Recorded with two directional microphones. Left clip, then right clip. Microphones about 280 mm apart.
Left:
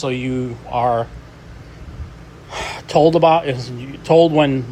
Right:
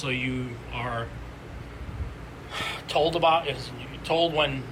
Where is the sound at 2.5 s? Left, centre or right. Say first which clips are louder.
Left 5 dB; left.